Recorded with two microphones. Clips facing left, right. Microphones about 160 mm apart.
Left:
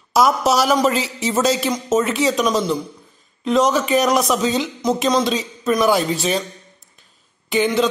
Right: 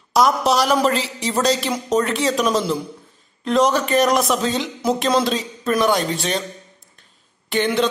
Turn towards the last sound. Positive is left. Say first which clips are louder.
# left 2 dB
turn(degrees=0)  # may be behind; listen again after turning